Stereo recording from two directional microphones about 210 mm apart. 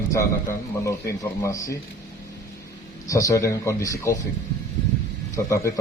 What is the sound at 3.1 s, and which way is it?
A man's voice, 15° left (ahead or behind).